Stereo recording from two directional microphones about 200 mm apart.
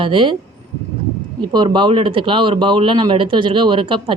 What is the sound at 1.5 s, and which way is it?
Speech, 20° right (ahead or behind).